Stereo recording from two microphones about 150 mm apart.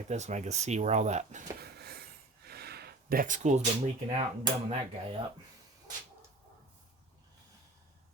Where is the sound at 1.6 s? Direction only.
90° right; by 3.6 s 55° right (ahead or behind).